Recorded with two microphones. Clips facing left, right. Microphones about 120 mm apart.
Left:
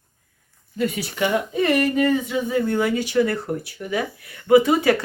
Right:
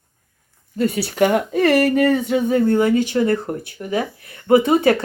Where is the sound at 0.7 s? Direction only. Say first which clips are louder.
Right 4 dB; 35° right (ahead or behind).